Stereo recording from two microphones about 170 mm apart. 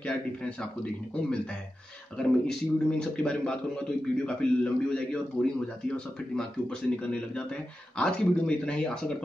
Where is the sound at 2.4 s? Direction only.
5° left (ahead or behind).